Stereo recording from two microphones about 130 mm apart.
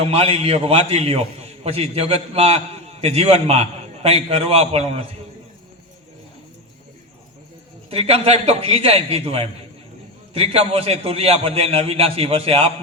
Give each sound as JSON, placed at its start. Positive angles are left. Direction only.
{"t": 0.0, "sound": "a man's voice", "side_deg": -50}
{"t": 7.9, "sound": "a man's voice", "side_deg": -50}